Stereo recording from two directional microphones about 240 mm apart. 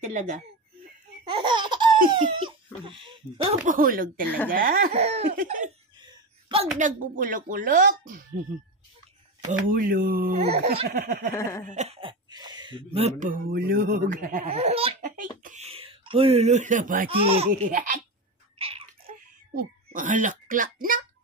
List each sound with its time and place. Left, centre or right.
0.0 s speech: right
1.3 s laughter: centre
2.1 s speech: right
3.7 s speech: right
5.9 s a sound: right
6.8 s speech: right
9.7 s speech: right
10.3 s speech: right
17.2 s speech: right
17.5 s speech: right
18.6 s babbling: right
19.5 s speech: right